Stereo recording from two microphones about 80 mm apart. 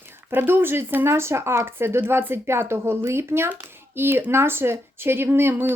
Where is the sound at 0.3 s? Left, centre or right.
Right.